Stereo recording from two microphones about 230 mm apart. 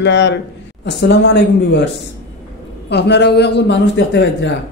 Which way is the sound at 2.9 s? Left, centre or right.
Left.